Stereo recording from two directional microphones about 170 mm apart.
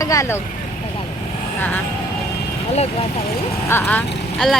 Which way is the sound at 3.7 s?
10° left (ahead or behind).